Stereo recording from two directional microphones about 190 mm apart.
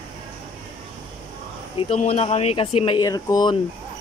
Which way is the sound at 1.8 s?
35° left (ahead or behind).